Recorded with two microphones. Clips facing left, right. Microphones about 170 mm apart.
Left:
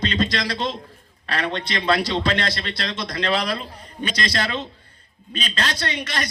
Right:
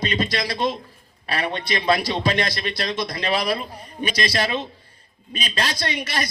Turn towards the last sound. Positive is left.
turn(degrees=-10)  # may be behind; listen again after turning